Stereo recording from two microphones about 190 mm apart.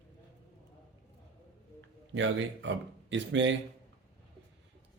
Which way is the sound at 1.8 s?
75° right (ahead or behind).